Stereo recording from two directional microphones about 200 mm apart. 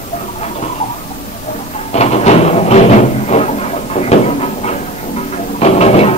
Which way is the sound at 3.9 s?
35° left (ahead or behind).